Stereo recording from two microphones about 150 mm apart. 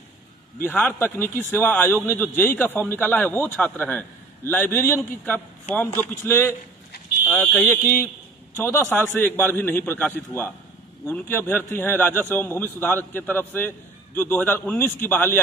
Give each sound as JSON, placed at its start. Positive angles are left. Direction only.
{"t": 0.6, "sound": "a man's voice", "side_deg": 15}